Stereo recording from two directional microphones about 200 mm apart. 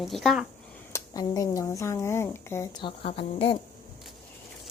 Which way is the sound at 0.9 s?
15° left (ahead or behind).